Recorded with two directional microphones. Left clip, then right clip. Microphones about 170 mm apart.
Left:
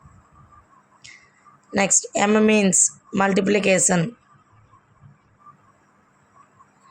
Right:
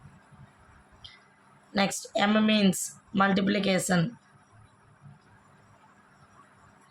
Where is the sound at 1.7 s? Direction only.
45° left (ahead or behind).